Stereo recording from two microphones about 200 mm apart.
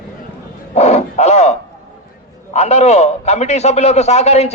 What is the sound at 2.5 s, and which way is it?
A man's voice, 35° left (ahead or behind).